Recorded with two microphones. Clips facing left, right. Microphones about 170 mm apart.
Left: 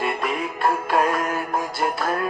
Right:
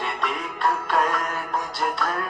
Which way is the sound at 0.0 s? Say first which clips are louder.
Left 4 dB; 5° left (ahead or behind).